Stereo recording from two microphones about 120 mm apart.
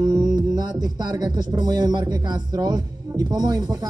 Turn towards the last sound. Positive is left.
turn(degrees=-35)  # may be behind; listen again after turning